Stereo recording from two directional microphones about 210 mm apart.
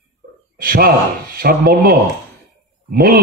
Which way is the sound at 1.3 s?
45° right (ahead or behind).